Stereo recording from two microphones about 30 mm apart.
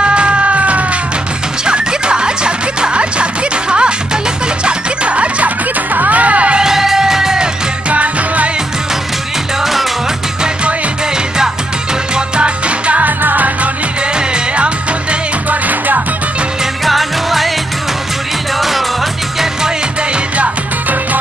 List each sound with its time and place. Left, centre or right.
0.0 s music: right
1.6 s music: right
5.9 s music: right
6.6 s music: centre
7.9 s music: right
9.6 s music: centre
12.4 s music: right
13.0 s music: right
14.1 s music: right
15.5 s music: right
16.8 s music: centre
18.6 s music: centre